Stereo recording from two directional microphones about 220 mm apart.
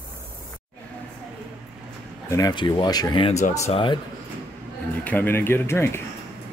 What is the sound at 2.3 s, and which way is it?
Speech, 20° left (ahead or behind).